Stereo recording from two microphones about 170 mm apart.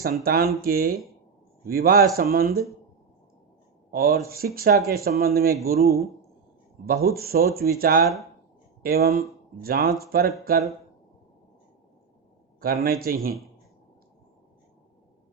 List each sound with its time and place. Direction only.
0.0 s speech: 60° right (ahead or behind)
3.9 s speech: 60° right (ahead or behind)
12.5 s speech: 60° right (ahead or behind)